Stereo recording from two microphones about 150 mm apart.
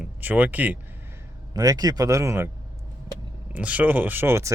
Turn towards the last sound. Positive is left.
turn(degrees=-15)  # may be behind; listen again after turning